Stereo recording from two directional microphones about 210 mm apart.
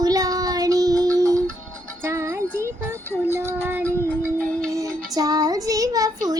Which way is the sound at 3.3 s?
10° right (ahead or behind).